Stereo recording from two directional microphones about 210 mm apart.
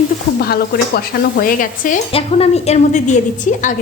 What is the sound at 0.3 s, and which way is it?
Speech, 45° left (ahead or behind).